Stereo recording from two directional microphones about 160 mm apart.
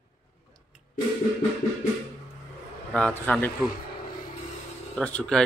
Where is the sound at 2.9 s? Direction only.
5° left (ahead or behind).